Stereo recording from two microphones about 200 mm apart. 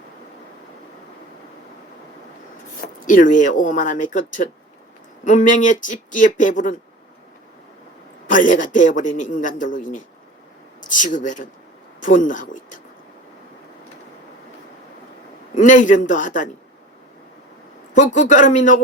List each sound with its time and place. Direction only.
2.8 s a man's voice: 40° left (ahead or behind)
8.3 s a man's voice: 40° left (ahead or behind)
15.5 s a man's voice: 40° left (ahead or behind)
17.9 s a man's voice: 40° left (ahead or behind)